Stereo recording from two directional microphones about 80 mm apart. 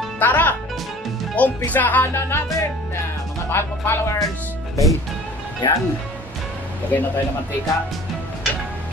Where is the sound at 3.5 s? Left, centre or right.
Left.